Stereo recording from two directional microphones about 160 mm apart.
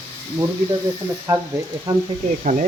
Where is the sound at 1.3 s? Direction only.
20° right (ahead or behind).